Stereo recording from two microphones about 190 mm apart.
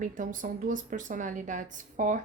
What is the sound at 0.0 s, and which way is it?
A woman's voice, 45° right (ahead or behind).